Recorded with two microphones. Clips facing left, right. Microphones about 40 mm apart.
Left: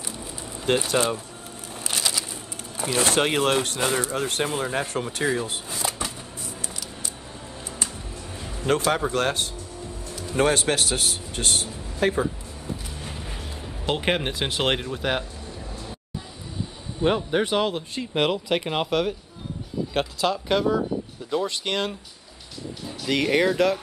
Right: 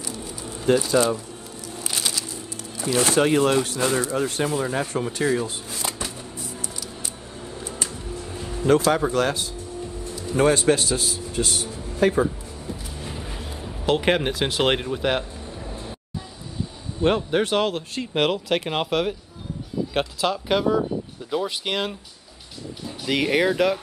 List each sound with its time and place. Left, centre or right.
0.7 s speech: left
2.8 s speech: left
8.6 s a man's voice: left
13.0 s a sound: centre
14.6 s speech: centre
15.4 s a sound: right
17.0 s speech: centre